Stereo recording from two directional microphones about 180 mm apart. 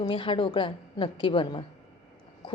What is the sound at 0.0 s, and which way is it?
A woman's voice, 30° left (ahead or behind).